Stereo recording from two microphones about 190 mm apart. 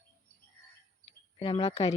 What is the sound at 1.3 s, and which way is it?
Speech, 30° left (ahead or behind).